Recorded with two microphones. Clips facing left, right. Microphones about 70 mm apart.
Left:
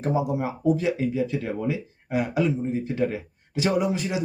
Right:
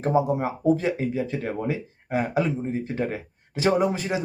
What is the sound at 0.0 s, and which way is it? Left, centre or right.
Speech, right.